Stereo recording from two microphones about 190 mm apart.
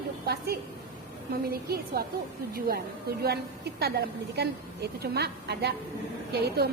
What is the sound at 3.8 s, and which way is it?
A woman's voice, 55° right (ahead or behind).